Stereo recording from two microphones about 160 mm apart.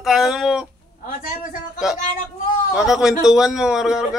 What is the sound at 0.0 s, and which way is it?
Speech, centre (ahead or behind).